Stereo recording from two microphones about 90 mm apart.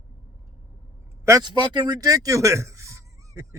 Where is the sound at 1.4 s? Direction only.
60° right (ahead or behind).